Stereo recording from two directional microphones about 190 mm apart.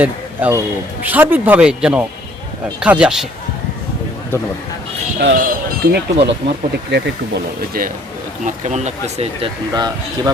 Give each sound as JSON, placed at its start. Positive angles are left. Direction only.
{"t": 0.0, "sound": "speech", "side_deg": -10}
{"t": 5.2, "sound": "speech", "side_deg": -55}
{"t": 8.4, "sound": "speech", "side_deg": -35}
{"t": 9.7, "sound": "speech", "side_deg": -20}